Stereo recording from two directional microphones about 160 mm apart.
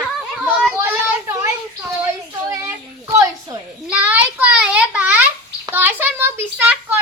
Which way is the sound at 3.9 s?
10° right (ahead or behind).